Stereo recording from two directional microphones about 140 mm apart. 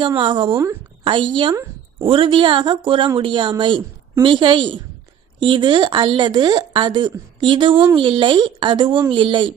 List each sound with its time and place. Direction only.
0.2 s speech: 35° right (ahead or behind)